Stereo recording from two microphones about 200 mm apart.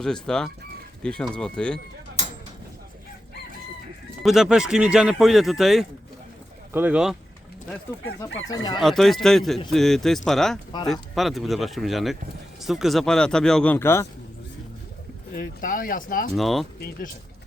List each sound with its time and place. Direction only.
0.0 s speech: 5° left (ahead or behind)
4.2 s speech: centre (ahead or behind)
7.7 s speech: 10° left (ahead or behind)
8.4 s speech: 20° left (ahead or behind)
8.8 s speech: centre (ahead or behind)
15.3 s speech: 45° left (ahead or behind)
16.3 s speech: centre (ahead or behind)